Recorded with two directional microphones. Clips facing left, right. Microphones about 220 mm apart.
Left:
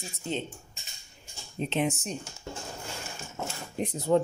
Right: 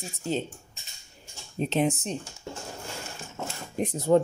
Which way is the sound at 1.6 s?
40° right (ahead or behind).